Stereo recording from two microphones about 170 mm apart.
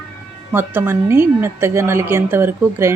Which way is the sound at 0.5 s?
10° right (ahead or behind).